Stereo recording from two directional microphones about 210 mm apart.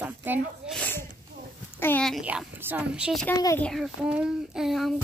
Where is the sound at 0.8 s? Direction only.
10° left (ahead or behind).